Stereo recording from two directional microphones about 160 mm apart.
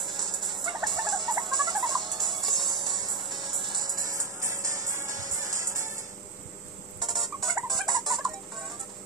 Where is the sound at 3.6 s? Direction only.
25° right (ahead or behind).